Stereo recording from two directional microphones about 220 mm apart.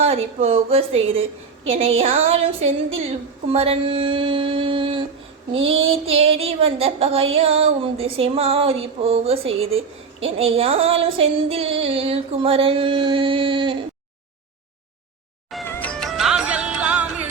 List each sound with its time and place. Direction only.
0.0 s female singing: 30° right (ahead or behind)
15.6 s music: 5° left (ahead or behind)